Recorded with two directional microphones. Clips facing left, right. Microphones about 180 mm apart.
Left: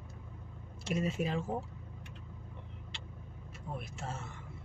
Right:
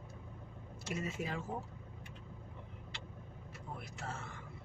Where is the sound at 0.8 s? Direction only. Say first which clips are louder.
Left 6 dB; 25° left (ahead or behind).